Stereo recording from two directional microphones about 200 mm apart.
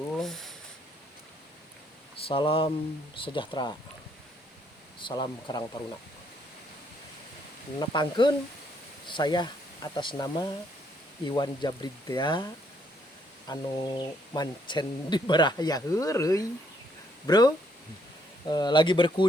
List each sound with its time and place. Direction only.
0.2 s a sound: centre (ahead or behind)
2.2 s speech: 25° left (ahead or behind)
4.9 s speech: 25° left (ahead or behind)
7.8 s speech: 25° left (ahead or behind)
13.5 s speech: 20° left (ahead or behind)